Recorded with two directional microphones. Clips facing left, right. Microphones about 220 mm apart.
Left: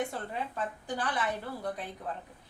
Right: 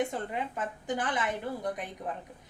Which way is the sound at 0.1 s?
20° right (ahead or behind).